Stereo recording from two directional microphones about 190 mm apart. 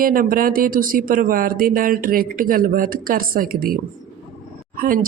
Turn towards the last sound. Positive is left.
turn(degrees=-45)  # may be behind; listen again after turning